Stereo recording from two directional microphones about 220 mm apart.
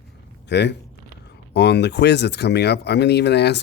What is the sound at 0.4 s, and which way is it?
Speech, 50° left (ahead or behind).